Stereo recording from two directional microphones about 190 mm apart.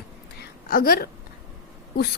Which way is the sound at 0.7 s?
50° left (ahead or behind).